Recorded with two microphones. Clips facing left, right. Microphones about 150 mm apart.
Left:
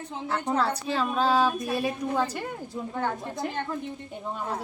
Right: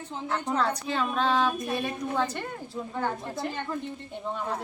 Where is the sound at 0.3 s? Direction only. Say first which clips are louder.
Left 1 dB; 5° left (ahead or behind).